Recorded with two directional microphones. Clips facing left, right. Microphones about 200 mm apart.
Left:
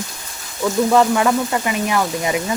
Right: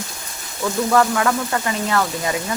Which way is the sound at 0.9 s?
20° left (ahead or behind).